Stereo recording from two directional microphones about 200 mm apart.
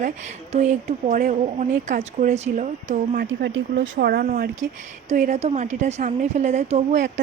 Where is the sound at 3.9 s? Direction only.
50° right (ahead or behind).